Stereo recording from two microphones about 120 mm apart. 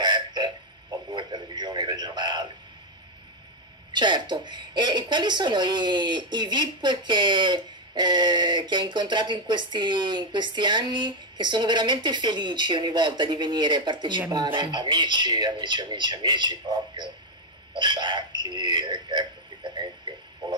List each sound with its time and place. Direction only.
0.0 s radio: 35° right (ahead or behind)
3.9 s a woman's voice: 40° right (ahead or behind)